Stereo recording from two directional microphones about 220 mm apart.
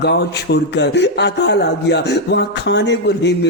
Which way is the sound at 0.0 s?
50° left (ahead or behind).